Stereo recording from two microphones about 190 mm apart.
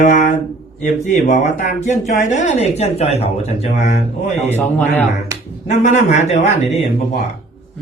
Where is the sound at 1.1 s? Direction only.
35° left (ahead or behind).